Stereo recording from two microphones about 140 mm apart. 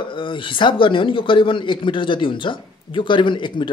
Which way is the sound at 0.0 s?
35° left (ahead or behind).